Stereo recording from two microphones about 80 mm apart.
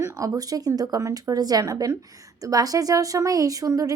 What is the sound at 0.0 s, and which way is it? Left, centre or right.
A woman's voice, right.